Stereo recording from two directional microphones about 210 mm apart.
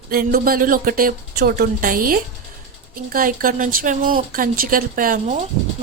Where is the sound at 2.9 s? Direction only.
45° right (ahead or behind).